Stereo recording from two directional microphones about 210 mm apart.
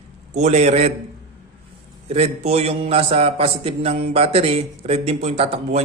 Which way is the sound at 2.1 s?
30° right (ahead or behind).